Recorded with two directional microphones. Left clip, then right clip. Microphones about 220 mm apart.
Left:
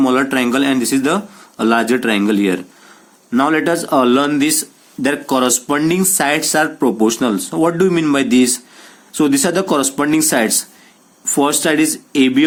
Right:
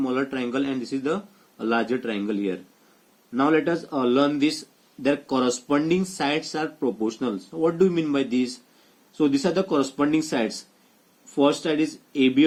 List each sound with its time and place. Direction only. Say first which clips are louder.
0.0 s speech: left 12 dB; 50° left (ahead or behind)